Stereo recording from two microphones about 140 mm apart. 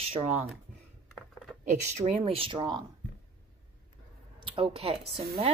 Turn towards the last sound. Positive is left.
turn(degrees=-45)  # may be behind; listen again after turning